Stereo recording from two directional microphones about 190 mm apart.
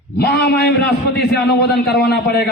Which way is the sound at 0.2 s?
55° left (ahead or behind).